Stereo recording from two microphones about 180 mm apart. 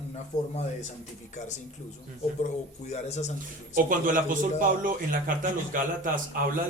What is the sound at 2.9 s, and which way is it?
Speech, 40° left (ahead or behind).